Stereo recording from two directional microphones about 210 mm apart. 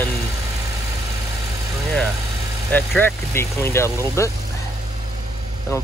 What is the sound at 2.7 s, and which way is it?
Speech, 10° left (ahead or behind).